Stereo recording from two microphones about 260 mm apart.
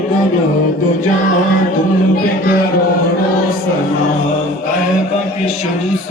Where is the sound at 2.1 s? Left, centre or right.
Left.